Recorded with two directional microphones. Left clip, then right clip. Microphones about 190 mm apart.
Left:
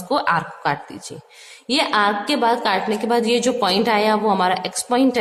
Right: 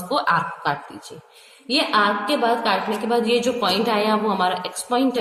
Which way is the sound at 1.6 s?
35° left (ahead or behind).